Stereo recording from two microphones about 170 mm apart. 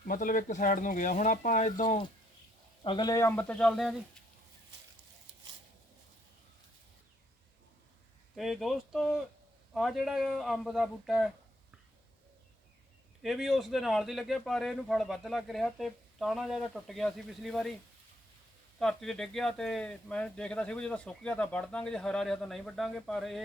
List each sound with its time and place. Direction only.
0.1 s speech: 55° left (ahead or behind)
2.8 s speech: 25° left (ahead or behind); by 4.2 s 5° left (ahead or behind)
8.4 s speech: centre (ahead or behind)
13.2 s speech: centre (ahead or behind)
18.8 s speech: centre (ahead or behind)